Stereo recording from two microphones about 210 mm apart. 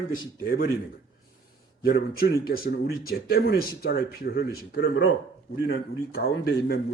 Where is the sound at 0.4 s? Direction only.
45° left (ahead or behind).